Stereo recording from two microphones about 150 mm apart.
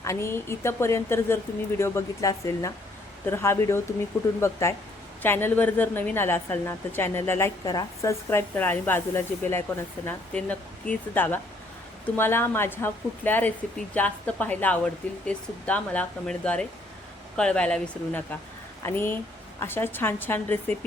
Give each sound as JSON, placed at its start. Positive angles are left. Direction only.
{"t": 0.0, "sound": "speech", "side_deg": 20}
{"t": 7.6, "sound": "speech", "side_deg": 25}